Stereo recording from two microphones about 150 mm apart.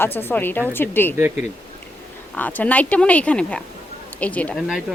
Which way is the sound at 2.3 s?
10° left (ahead or behind).